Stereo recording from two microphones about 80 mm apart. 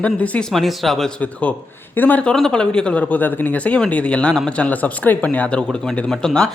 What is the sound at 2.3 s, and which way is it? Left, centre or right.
Speech, centre.